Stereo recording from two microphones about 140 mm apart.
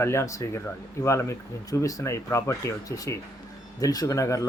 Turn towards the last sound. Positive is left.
turn(degrees=20)  # may be behind; listen again after turning